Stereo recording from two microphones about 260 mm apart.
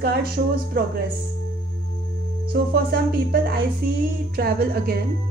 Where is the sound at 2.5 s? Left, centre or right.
Right.